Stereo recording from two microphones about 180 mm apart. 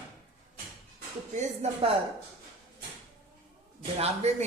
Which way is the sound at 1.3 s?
40° right (ahead or behind).